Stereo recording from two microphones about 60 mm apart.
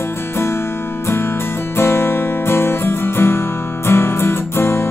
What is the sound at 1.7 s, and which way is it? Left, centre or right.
Music, left.